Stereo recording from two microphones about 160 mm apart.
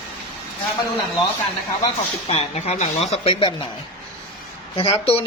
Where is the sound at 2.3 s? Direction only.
40° left (ahead or behind).